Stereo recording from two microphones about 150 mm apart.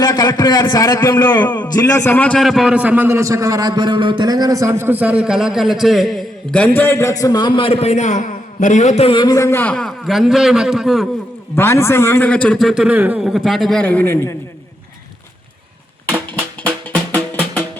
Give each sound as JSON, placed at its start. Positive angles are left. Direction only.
{"t": 0.0, "sound": "a man's voice", "side_deg": 30}
{"t": 9.1, "sound": "a man's voice", "side_deg": 25}
{"t": 11.5, "sound": "a man's voice", "side_deg": 15}
{"t": 16.3, "sound": "music", "side_deg": 10}